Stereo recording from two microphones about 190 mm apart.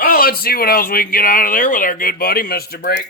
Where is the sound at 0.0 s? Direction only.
50° left (ahead or behind).